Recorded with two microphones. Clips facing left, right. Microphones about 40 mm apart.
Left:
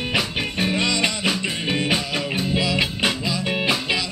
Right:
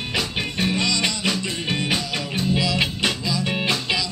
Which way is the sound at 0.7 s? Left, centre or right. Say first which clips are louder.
Left 1 dB; left.